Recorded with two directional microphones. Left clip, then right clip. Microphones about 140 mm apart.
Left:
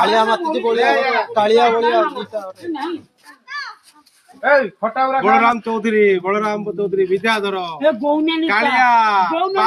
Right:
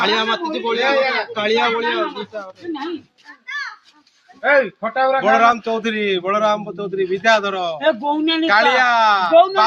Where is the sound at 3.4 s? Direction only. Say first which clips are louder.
Right 1 dB; 40° right (ahead or behind).